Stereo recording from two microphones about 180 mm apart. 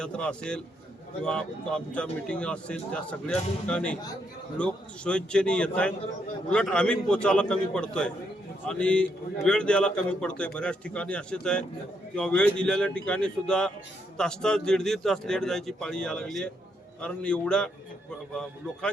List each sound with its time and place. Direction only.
0.0 s a man's voice: 5° left (ahead or behind)